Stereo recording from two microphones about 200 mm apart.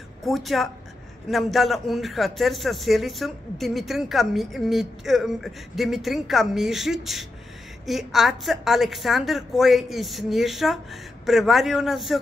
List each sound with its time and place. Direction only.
0.2 s a man's voice: centre (ahead or behind)